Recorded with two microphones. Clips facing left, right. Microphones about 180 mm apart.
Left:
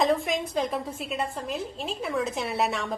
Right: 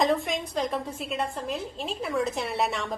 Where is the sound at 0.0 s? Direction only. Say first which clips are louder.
Left 1 dB; centre (ahead or behind).